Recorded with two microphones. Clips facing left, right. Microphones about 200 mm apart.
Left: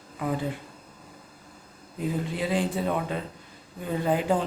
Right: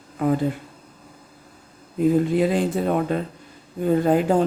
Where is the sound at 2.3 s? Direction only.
50° right (ahead or behind).